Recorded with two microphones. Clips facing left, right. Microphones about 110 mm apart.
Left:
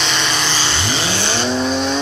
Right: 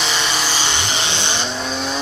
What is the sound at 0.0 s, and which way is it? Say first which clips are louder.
Vehicle: left 1 dB; 5° right (ahead or behind).